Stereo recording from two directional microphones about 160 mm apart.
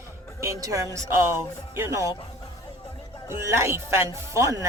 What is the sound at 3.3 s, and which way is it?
A woman's voice, 15° right (ahead or behind).